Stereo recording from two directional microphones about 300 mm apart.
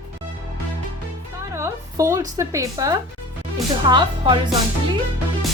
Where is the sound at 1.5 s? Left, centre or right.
Centre.